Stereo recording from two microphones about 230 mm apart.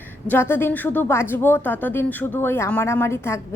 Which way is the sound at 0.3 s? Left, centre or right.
Centre.